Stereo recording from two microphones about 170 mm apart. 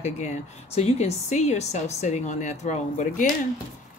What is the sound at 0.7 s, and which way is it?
A woman's voice, 40° left (ahead or behind).